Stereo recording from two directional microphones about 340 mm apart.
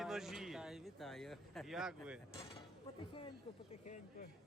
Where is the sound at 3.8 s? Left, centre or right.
Left.